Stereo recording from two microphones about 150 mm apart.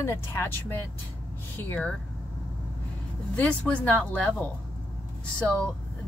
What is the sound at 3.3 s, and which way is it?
Speech, 10° left (ahead or behind).